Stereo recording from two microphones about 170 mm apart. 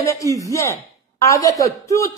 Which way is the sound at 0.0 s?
20° left (ahead or behind).